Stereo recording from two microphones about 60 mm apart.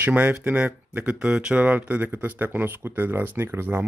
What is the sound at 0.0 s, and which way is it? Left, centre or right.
Speech, right.